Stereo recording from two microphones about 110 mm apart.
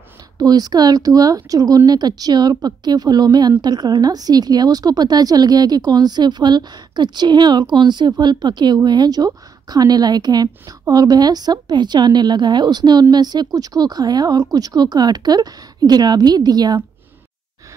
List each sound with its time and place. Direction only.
0.4 s a woman's voice: 35° right (ahead or behind)